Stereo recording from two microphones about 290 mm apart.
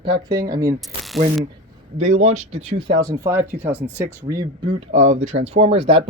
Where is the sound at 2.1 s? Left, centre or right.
Right.